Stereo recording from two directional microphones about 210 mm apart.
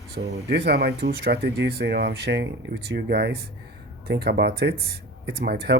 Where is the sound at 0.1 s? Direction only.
55° right (ahead or behind).